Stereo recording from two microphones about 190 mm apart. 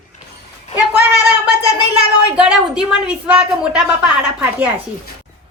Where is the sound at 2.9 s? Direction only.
5° right (ahead or behind).